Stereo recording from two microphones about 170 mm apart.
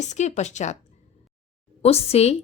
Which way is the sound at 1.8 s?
35° left (ahead or behind).